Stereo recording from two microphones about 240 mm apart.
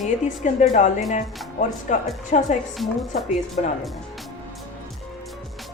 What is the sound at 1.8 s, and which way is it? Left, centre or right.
Speech, left.